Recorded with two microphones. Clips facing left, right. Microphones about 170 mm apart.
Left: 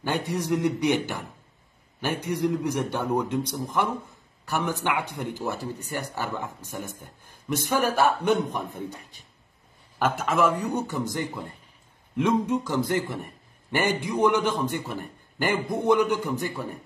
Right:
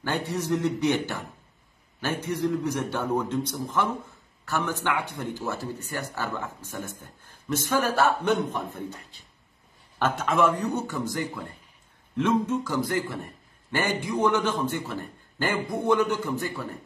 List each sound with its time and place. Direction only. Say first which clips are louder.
0.0 s a man's voice: left 1 dB; 15° left (ahead or behind)